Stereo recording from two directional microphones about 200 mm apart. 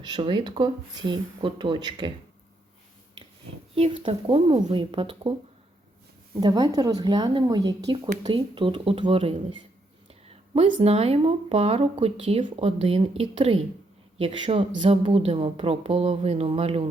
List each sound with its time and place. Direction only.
0.0 s speech: 20° right (ahead or behind)
3.8 s speech: 25° right (ahead or behind)
6.3 s speech: 20° right (ahead or behind)